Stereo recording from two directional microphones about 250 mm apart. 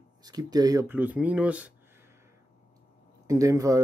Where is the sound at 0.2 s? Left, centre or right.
Centre.